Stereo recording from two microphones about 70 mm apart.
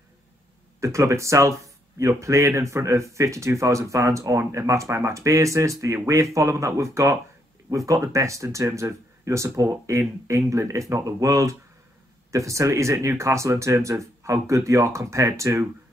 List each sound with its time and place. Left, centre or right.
0.7 s speech: right